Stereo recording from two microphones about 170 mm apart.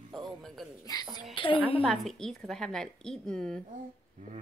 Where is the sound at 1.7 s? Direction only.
Centre (ahead or behind).